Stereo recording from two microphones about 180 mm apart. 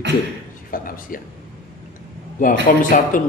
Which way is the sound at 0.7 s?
50° left (ahead or behind).